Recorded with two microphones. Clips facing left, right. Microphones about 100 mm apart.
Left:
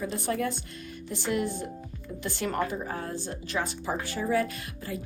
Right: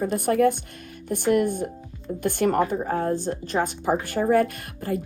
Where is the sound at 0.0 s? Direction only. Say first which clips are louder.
Right 9 dB; 50° right (ahead or behind).